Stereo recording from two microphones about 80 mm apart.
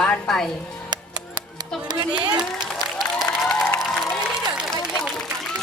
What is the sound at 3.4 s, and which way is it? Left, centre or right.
Music, centre.